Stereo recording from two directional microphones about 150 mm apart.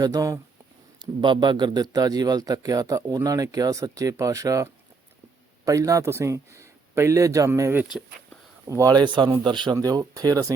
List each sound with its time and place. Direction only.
0.0 s a man's voice: 25° right (ahead or behind)